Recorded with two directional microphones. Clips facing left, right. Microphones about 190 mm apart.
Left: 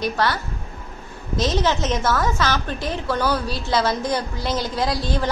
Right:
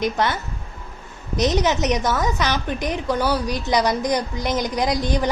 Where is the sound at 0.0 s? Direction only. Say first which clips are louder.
Right 1 dB; 20° right (ahead or behind).